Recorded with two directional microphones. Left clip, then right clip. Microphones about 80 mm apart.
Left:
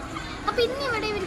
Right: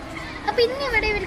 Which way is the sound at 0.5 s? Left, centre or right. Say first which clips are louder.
Right 5 dB; left.